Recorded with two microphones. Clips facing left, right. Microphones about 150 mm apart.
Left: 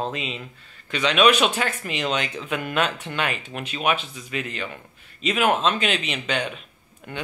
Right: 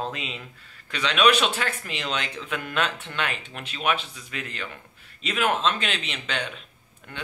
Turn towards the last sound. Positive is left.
turn(degrees=5)  # may be behind; listen again after turning